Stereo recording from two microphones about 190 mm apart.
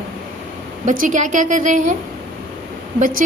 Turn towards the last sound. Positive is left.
turn(degrees=-45)  # may be behind; listen again after turning